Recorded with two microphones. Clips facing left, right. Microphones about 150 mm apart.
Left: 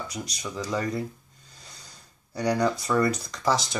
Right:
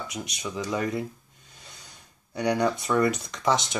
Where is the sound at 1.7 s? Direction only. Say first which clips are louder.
Even; 20° right (ahead or behind).